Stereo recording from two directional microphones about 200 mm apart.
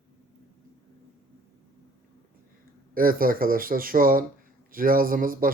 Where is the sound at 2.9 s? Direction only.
45° right (ahead or behind).